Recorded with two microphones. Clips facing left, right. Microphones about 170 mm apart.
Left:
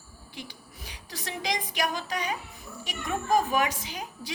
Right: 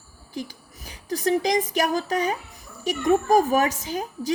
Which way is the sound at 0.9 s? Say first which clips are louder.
Right 16 dB; 45° right (ahead or behind).